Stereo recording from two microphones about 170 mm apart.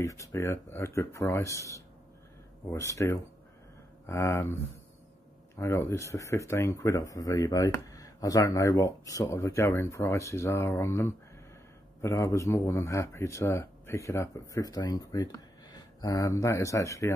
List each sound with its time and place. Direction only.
0.0 s speech: 20° left (ahead or behind)
5.6 s speech: 15° left (ahead or behind)